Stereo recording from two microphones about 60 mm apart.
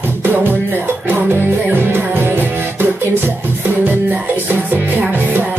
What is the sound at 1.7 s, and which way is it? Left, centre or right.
Music, right.